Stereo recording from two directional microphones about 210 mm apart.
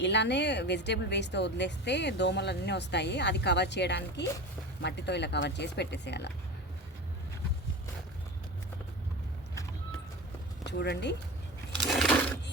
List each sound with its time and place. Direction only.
0.0 s a woman's voice: 55° left (ahead or behind)
10.7 s a woman's voice: 55° left (ahead or behind)
11.9 s a sound: centre (ahead or behind)